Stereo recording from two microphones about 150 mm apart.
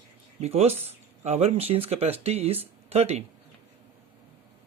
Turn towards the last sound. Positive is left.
turn(degrees=-45)  # may be behind; listen again after turning